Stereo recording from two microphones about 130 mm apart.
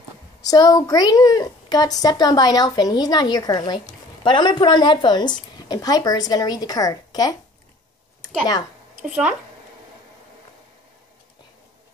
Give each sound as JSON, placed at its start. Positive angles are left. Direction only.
{"t": 0.4, "sound": "a woman's voice", "side_deg": 30}
{"t": 9.0, "sound": "speech", "side_deg": -10}